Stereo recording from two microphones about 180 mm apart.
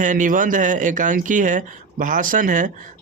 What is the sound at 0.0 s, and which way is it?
Speech, 45° right (ahead or behind).